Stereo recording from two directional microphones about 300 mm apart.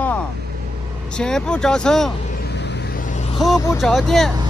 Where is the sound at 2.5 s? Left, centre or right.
Left.